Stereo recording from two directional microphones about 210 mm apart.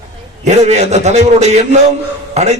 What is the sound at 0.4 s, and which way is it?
A man's voice, 30° right (ahead or behind).